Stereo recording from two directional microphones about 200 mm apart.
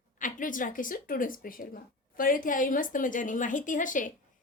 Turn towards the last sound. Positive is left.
turn(degrees=40)  # may be behind; listen again after turning